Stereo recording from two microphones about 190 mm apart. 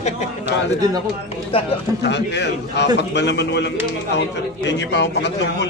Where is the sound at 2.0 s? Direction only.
65° left (ahead or behind).